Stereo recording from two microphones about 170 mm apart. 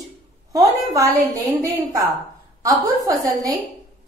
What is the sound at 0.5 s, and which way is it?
A woman's voice, 20° right (ahead or behind).